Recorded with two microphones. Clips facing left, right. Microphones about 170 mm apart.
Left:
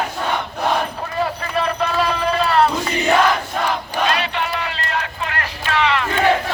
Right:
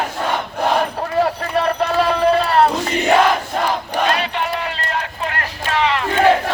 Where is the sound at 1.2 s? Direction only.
60° right (ahead or behind).